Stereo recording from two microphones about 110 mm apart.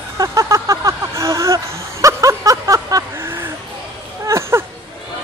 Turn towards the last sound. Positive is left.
turn(degrees=-25)  # may be behind; listen again after turning